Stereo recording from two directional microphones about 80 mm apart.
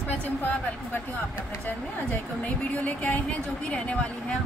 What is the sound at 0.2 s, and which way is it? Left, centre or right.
Speech, left.